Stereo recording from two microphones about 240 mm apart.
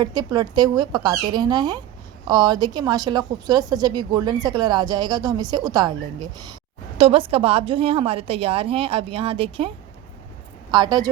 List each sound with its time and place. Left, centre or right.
0.0 s a woman's voice: centre